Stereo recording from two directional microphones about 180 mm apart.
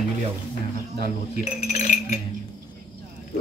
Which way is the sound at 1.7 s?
40° left (ahead or behind).